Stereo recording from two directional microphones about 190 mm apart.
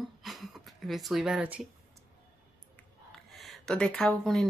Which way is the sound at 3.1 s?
Centre (ahead or behind).